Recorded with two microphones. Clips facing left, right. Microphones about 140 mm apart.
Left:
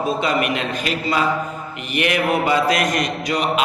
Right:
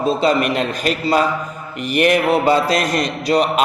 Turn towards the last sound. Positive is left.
turn(degrees=-35)  # may be behind; listen again after turning